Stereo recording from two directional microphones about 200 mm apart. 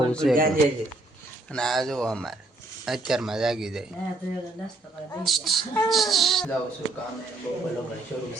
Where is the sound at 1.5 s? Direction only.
5° left (ahead or behind).